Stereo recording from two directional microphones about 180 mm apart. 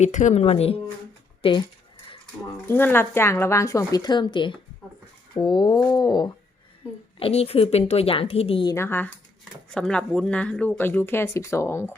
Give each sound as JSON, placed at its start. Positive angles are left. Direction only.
{"t": 0.0, "sound": "speech", "side_deg": 40}
{"t": 2.6, "sound": "speech", "side_deg": 10}
{"t": 7.2, "sound": "speech", "side_deg": 35}
{"t": 8.7, "sound": "speech", "side_deg": 15}